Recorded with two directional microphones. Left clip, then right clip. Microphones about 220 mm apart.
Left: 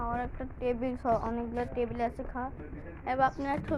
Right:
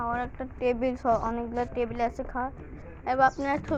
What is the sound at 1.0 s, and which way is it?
A woman's voice, 25° right (ahead or behind).